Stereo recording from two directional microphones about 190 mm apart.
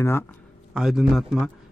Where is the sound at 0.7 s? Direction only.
Centre (ahead or behind).